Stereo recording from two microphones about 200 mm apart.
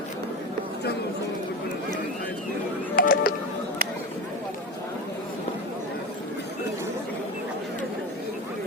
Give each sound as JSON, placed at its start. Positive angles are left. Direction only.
{"t": 2.9, "sound": "music", "side_deg": 45}